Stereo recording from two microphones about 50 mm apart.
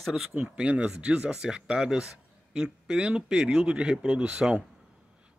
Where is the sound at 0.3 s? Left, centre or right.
Right.